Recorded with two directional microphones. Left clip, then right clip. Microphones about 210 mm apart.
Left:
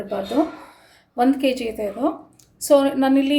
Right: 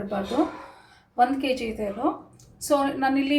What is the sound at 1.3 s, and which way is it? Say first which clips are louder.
A woman's voice: left 5 dB; 45° left (ahead or behind).